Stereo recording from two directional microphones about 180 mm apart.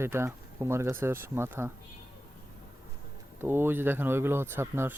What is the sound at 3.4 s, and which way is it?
Speech, 10° right (ahead or behind).